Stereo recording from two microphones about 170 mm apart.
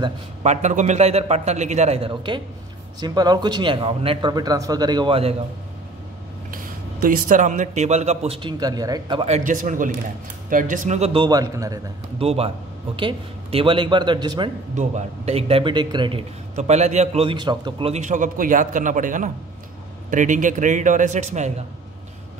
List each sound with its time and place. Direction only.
0.0 s speech: 40° right (ahead or behind)
6.5 s speech: 55° right (ahead or behind); by 9.2 s 25° right (ahead or behind)
9.2 s a man's voice: 45° right (ahead or behind)
11.2 s speech: 20° right (ahead or behind)
12.2 s speech: 35° right (ahead or behind)
14.8 s speech: 40° right (ahead or behind)
16.6 s a man's voice: 40° right (ahead or behind)